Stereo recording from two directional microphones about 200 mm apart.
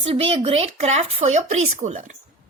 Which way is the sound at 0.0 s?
30° right (ahead or behind).